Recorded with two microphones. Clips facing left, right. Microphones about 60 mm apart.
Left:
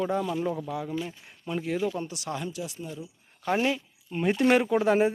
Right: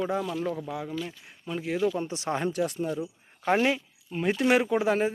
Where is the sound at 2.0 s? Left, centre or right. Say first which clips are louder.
Right 5 dB; right.